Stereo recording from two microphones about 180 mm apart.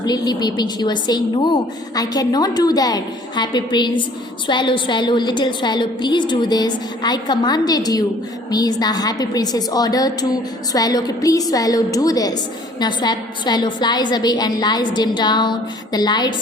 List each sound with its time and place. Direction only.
0.0 s a woman's voice: 20° left (ahead or behind)